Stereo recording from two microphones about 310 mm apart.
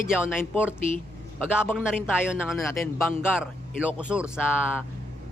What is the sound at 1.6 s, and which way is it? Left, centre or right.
A man's voice, centre.